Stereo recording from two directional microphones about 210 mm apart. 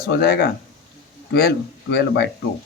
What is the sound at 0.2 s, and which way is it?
Speech, 50° left (ahead or behind).